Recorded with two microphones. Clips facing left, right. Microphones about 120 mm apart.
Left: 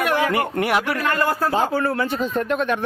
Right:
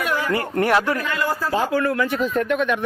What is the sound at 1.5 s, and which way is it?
Speech, 25° left (ahead or behind).